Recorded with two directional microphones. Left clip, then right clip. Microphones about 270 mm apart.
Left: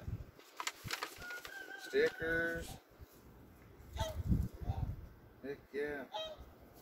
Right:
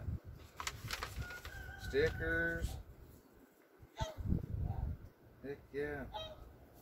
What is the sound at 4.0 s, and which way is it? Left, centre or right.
Honk, left.